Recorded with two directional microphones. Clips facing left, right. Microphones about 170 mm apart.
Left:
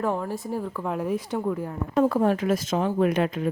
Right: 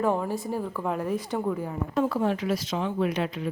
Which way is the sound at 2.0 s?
45° left (ahead or behind).